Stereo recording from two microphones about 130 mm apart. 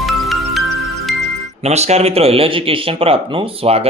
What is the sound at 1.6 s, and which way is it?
Speech, 55° right (ahead or behind).